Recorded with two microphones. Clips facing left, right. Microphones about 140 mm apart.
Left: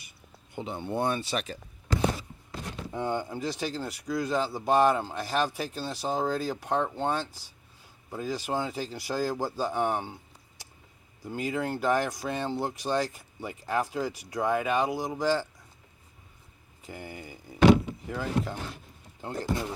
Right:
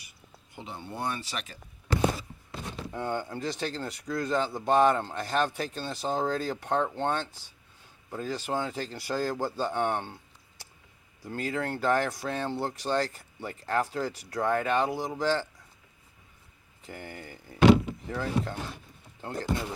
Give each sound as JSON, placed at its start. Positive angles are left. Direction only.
{"t": 0.5, "sound": "speech", "side_deg": 20}
{"t": 2.9, "sound": "speech", "side_deg": 15}
{"t": 11.2, "sound": "speech", "side_deg": 15}
{"t": 16.8, "sound": "speech", "side_deg": 10}